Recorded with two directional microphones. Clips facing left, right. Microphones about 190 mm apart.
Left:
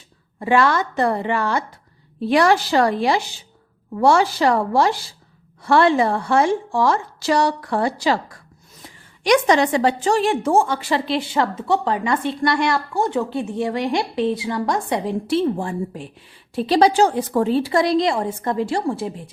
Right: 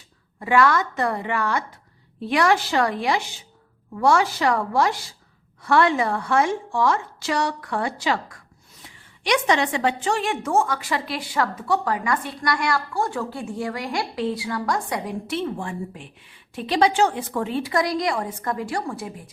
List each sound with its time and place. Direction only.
0.3 s a woman's voice: 30° left (ahead or behind)